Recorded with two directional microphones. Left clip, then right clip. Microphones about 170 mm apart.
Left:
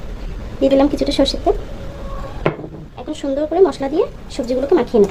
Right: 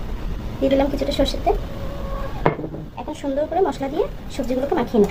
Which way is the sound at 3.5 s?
45° left (ahead or behind).